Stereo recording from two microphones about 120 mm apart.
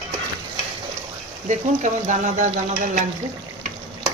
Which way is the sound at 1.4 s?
90° right.